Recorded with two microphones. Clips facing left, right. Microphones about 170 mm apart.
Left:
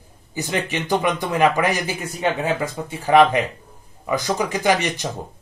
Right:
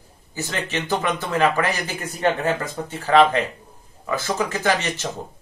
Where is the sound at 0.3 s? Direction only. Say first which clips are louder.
Left 3 dB; 15° left (ahead or behind).